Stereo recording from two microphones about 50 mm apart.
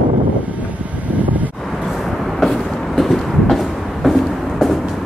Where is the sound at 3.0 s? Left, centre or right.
Centre.